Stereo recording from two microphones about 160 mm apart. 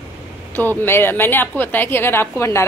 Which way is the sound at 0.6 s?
15° left (ahead or behind).